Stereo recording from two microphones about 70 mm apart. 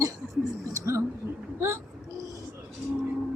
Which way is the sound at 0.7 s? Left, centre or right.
Right.